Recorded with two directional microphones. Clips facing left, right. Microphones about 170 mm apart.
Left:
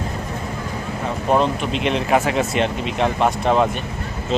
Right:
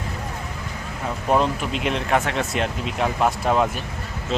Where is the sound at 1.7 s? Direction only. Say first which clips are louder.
Left 5 dB; centre (ahead or behind).